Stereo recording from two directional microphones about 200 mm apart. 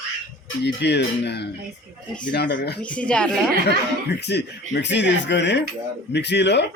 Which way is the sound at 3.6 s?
55° left (ahead or behind).